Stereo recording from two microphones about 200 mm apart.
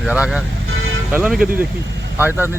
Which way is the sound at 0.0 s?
5° right (ahead or behind).